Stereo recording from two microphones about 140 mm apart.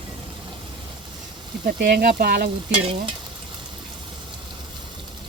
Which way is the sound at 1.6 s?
90° right.